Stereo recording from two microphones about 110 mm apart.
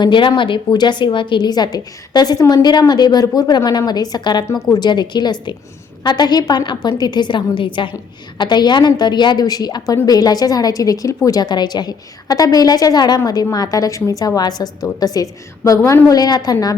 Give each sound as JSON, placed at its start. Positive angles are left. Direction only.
{"t": 0.0, "sound": "a woman's voice", "side_deg": 45}
{"t": 15.8, "sound": "a woman's voice", "side_deg": 20}
{"t": 16.0, "sound": "a woman's voice", "side_deg": 35}